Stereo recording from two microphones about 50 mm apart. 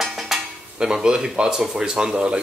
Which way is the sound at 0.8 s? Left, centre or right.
Centre.